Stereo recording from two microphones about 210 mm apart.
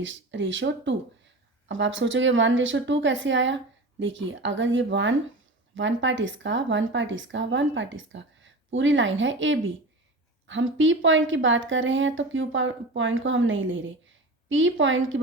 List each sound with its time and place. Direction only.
0.0 s speech: 60° right (ahead or behind)